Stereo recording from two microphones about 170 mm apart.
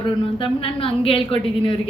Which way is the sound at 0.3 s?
30° left (ahead or behind).